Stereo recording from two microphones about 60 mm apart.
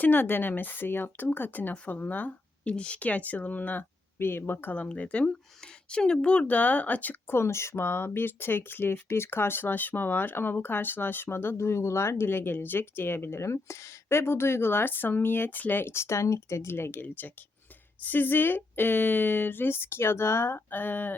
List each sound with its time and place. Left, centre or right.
0.0 s speech: left
1.7 s speech: left
2.6 s speech: centre
4.2 s speech: left
4.8 s speech: left
13.4 s speech: left